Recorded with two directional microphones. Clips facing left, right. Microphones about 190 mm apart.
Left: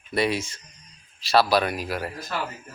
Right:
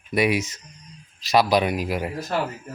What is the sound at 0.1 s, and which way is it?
Speech, 15° right (ahead or behind).